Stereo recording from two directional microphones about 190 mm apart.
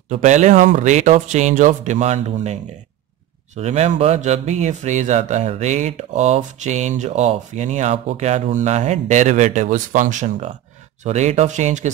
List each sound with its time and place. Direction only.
0.1 s speech: 40° right (ahead or behind)